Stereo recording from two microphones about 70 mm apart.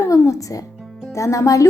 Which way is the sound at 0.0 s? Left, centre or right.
Left.